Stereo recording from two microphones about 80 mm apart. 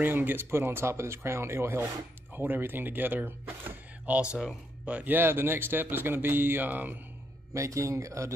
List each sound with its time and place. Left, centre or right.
0.0 s speech: right
7.5 s speech: right